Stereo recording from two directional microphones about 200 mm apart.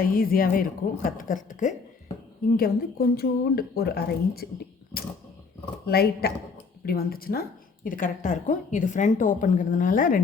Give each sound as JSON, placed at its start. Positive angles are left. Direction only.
{"t": 0.0, "sound": "a woman's voice", "side_deg": 45}
{"t": 4.9, "sound": "a sound", "side_deg": 50}
{"t": 5.8, "sound": "a woman's voice", "side_deg": 50}